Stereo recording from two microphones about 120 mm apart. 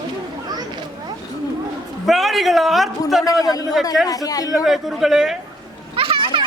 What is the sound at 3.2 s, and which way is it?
A woman's voice, 30° left (ahead or behind).